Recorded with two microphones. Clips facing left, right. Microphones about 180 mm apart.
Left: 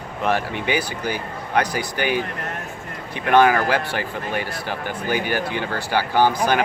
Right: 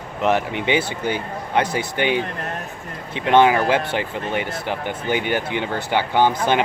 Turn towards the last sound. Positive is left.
turn(degrees=-25)  # may be behind; listen again after turning